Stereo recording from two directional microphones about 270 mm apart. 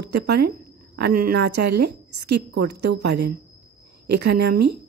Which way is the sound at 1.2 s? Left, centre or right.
Right.